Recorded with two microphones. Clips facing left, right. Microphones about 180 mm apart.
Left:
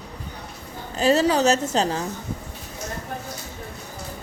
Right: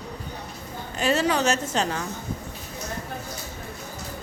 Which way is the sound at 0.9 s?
35° left (ahead or behind).